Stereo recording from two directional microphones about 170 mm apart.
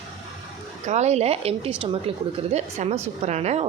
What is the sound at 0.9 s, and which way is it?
A woman's voice, 40° right (ahead or behind).